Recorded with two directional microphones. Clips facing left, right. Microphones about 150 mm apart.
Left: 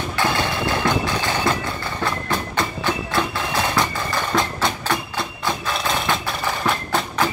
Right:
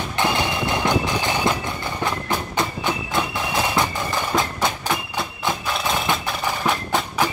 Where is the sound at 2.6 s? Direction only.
15° right (ahead or behind).